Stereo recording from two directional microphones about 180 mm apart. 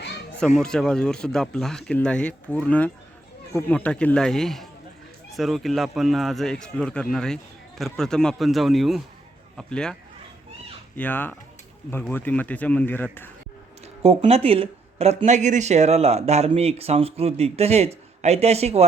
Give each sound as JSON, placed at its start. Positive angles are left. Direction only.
{"t": 0.3, "sound": "speech", "side_deg": 5}
{"t": 14.0, "sound": "speech", "side_deg": -35}